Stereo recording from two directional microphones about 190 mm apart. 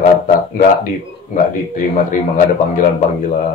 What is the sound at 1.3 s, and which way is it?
A man's voice, 40° left (ahead or behind).